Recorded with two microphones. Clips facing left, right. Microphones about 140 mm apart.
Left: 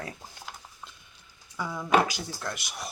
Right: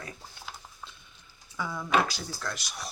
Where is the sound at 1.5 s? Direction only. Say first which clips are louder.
Left 3 dB; 10° left (ahead or behind).